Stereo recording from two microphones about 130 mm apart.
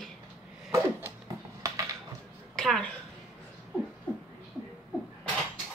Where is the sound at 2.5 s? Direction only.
5° left (ahead or behind).